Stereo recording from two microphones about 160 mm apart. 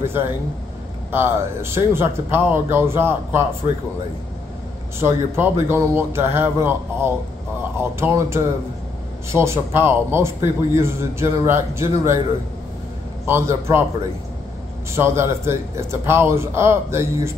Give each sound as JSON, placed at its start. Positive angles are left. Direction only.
{"t": 0.0, "sound": "a man's voice", "side_deg": -15}
{"t": 4.9, "sound": "a man's voice", "side_deg": -15}
{"t": 13.3, "sound": "a man's voice", "side_deg": -15}
{"t": 15.0, "sound": "a man's voice", "side_deg": -15}